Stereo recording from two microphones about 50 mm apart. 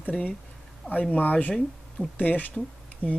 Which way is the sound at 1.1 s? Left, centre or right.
Left.